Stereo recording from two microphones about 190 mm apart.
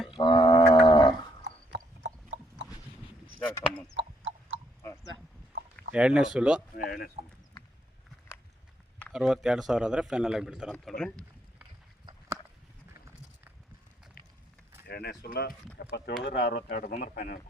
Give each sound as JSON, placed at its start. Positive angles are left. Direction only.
{"t": 0.1, "sound": "wild animals", "side_deg": 25}
{"t": 4.0, "sound": "chicken", "side_deg": -70}
{"t": 5.9, "sound": "a man's voice", "side_deg": -5}
{"t": 6.7, "sound": "speech", "side_deg": 50}
{"t": 9.0, "sound": "a man's voice", "side_deg": 0}
{"t": 12.9, "sound": "a sound", "side_deg": -15}
{"t": 14.2, "sound": "run", "side_deg": 50}
{"t": 14.8, "sound": "speech", "side_deg": 60}